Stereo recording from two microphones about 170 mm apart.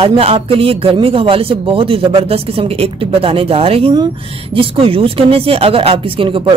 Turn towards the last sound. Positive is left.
turn(degrees=-30)  # may be behind; listen again after turning